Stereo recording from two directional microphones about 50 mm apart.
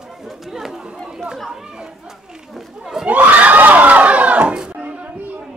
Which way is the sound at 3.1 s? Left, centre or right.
Right.